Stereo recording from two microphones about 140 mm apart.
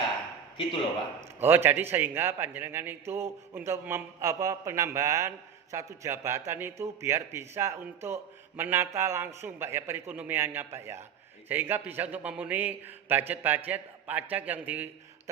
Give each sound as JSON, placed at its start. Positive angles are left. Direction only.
{"t": 1.2, "sound": "a man's voice", "side_deg": -15}